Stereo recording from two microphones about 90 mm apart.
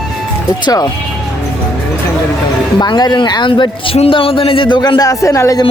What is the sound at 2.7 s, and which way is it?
Speech, 55° left (ahead or behind).